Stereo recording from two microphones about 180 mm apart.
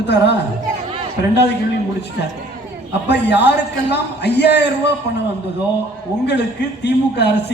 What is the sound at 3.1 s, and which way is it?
A man's voice, 70° left (ahead or behind).